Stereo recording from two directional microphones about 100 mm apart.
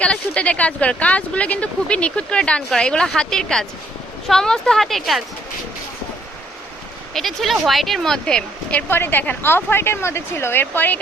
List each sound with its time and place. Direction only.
0.0 s speech: 10° left (ahead or behind)
7.1 s speech: centre (ahead or behind)
8.9 s speech: 20° left (ahead or behind)